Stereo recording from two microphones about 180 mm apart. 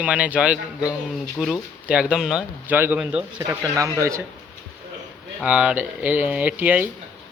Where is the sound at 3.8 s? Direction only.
15° right (ahead or behind).